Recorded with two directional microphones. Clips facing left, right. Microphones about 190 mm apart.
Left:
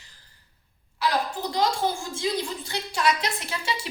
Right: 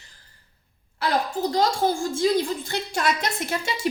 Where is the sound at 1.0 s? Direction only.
45° right (ahead or behind).